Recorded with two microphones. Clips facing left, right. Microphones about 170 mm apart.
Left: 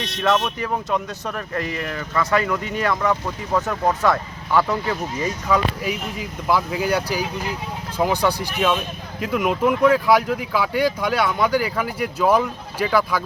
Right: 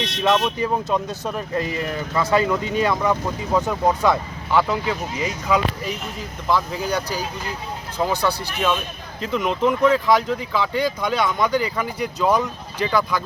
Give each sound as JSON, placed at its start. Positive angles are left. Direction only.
{"t": 0.2, "sound": "speech", "side_deg": -20}
{"t": 5.8, "sound": "speech", "side_deg": 10}